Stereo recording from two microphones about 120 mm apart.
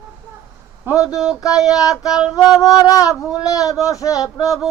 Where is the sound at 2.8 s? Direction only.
30° left (ahead or behind).